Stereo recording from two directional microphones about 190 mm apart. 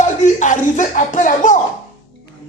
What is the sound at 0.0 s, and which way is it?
Speech, 40° left (ahead or behind).